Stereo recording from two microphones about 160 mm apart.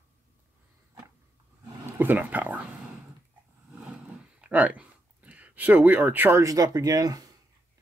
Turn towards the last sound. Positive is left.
turn(degrees=-25)  # may be behind; listen again after turning